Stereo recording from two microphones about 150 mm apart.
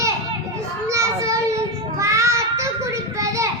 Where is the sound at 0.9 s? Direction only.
20° right (ahead or behind).